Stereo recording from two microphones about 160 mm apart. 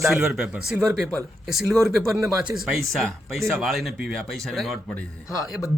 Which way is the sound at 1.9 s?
Centre (ahead or behind).